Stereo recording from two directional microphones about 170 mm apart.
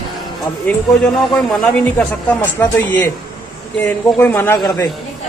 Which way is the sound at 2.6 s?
10° left (ahead or behind).